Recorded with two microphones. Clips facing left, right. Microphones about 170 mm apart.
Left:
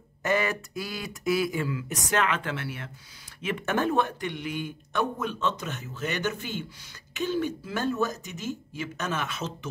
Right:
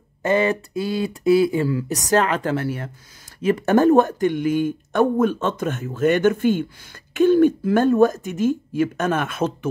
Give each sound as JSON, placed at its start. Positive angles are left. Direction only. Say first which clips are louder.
{"t": 0.2, "sound": "speech", "louder": "right 7 dB", "side_deg": -30}